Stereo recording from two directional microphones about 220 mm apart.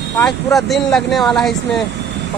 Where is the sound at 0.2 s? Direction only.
Centre (ahead or behind).